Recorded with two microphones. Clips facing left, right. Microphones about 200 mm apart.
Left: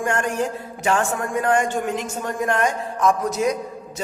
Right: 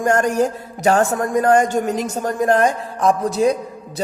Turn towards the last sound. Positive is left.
turn(degrees=-30)  # may be behind; listen again after turning